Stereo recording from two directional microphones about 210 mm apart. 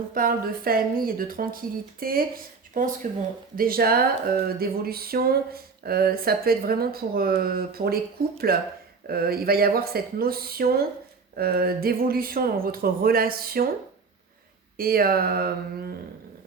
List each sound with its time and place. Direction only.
0.1 s speech: 45° right (ahead or behind)
14.8 s speech: 45° right (ahead or behind)